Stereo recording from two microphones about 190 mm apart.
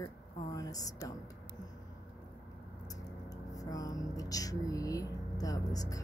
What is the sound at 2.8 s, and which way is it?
Speech, 20° left (ahead or behind).